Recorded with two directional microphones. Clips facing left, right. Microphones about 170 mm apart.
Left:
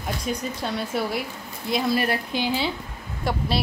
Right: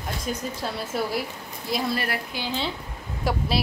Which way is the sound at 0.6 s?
Centre (ahead or behind).